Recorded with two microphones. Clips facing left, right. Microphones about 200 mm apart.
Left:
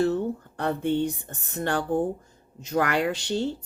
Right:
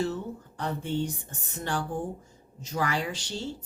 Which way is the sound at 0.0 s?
60° left (ahead or behind).